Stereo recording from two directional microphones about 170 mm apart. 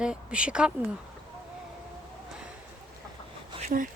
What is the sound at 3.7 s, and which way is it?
Speech, 55° right (ahead or behind).